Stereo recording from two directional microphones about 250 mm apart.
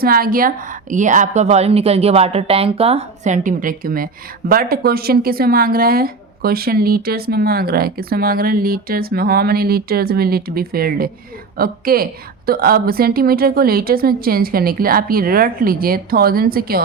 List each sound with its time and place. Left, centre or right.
0.0 s a woman's voice: right